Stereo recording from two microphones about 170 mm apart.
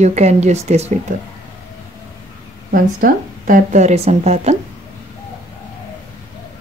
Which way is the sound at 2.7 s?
55° right (ahead or behind).